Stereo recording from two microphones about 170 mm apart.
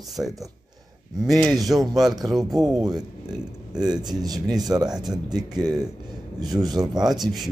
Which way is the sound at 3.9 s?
25° right (ahead or behind).